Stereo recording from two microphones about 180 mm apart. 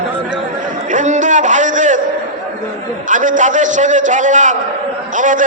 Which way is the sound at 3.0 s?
45° right (ahead or behind).